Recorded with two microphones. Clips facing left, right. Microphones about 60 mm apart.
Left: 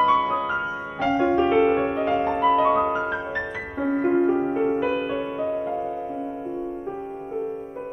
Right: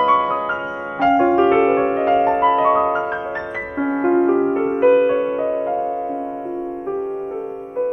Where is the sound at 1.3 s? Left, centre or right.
Right.